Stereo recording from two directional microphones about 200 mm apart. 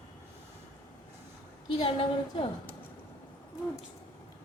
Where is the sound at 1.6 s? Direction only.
25° left (ahead or behind).